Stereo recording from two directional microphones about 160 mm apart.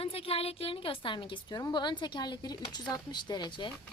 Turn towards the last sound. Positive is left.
turn(degrees=30)  # may be behind; listen again after turning